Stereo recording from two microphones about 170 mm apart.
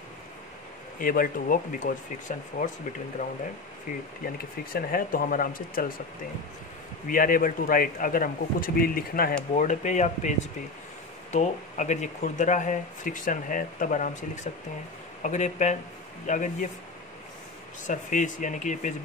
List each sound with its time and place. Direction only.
0.9 s a man's voice: 55° left (ahead or behind)
4.7 s a man's voice: 60° left (ahead or behind)
7.1 s a man's voice: 55° left (ahead or behind)
9.6 s speech: 45° left (ahead or behind)
11.3 s speech: 45° left (ahead or behind)
17.8 s speech: 50° left (ahead or behind)